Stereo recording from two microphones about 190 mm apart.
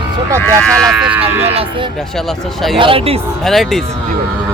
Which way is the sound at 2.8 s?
30° right (ahead or behind).